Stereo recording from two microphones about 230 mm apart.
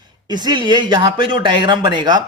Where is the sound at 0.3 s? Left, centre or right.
Centre.